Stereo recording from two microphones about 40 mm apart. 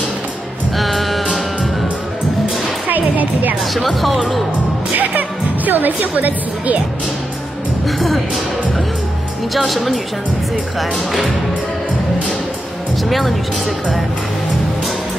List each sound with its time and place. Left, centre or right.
0.7 s music: centre
2.9 s music: right
5.7 s speech: right
9.7 s speech: centre